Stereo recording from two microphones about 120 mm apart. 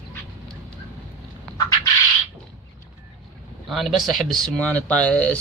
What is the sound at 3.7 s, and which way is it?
Speech, centre (ahead or behind).